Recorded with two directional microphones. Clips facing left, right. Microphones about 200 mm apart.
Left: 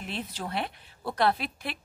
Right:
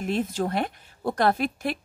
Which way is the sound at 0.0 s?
45° right (ahead or behind).